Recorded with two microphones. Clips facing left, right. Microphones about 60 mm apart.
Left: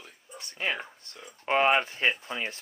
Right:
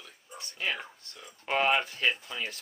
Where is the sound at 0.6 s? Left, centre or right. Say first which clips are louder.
Left 2 dB; left.